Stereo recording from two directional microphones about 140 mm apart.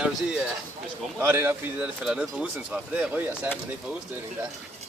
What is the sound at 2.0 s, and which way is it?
Speech, 5° right (ahead or behind).